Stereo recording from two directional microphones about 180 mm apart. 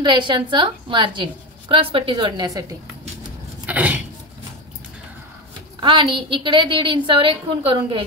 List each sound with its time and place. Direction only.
0.0 s a woman's voice: 25° right (ahead or behind)
3.6 s a sound: 10° right (ahead or behind)
5.8 s a woman's voice: 25° right (ahead or behind)